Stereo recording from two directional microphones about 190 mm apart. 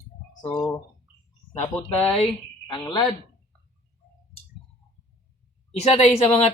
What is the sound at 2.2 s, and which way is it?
Speech, 25° left (ahead or behind).